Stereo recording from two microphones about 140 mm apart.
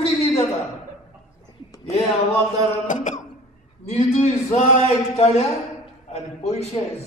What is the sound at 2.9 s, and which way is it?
Throat clearing, 60° left (ahead or behind).